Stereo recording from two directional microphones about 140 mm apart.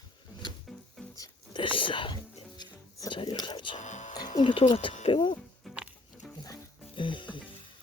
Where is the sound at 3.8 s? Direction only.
60° left (ahead or behind).